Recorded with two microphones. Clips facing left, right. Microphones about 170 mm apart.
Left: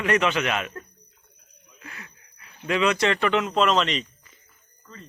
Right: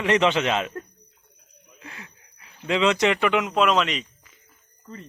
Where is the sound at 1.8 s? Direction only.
25° right (ahead or behind); by 4.3 s 5° right (ahead or behind).